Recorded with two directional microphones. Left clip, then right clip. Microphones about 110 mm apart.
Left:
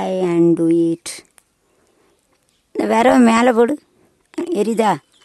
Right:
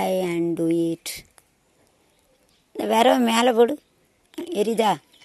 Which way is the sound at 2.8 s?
50° left (ahead or behind).